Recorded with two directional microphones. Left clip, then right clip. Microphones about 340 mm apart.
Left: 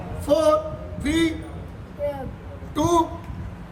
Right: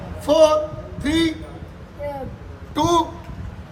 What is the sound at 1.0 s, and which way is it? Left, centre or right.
Speech, centre.